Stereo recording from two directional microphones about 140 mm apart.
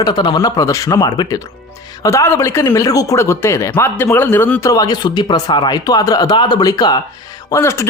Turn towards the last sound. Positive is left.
turn(degrees=20)  # may be behind; listen again after turning